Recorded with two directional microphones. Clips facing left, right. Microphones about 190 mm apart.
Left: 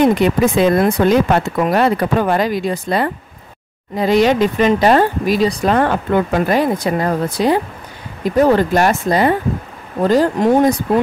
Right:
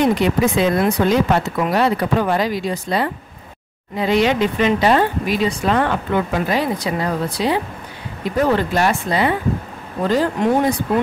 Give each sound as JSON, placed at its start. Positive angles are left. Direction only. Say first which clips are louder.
{"t": 0.0, "sound": "speech", "louder": "left 3 dB", "side_deg": 50}
{"t": 3.9, "sound": "speech", "louder": "left 4 dB", "side_deg": 40}